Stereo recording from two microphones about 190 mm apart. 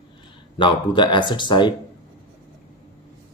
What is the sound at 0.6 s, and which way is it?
Speech, 25° left (ahead or behind).